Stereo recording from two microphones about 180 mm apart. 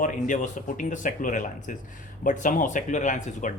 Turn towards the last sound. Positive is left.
turn(degrees=45)  # may be behind; listen again after turning